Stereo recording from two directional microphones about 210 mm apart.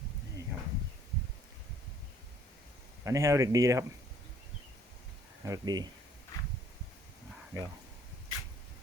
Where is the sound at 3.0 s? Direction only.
15° right (ahead or behind).